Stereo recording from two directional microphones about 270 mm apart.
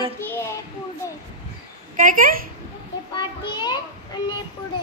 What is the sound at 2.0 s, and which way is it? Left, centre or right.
Speech, right.